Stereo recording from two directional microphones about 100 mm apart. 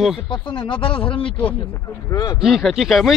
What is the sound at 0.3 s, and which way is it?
Speech, 55° left (ahead or behind).